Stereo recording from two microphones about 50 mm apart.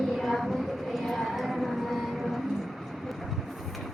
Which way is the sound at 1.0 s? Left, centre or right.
Centre.